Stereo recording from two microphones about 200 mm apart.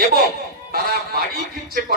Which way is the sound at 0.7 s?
50° right (ahead or behind).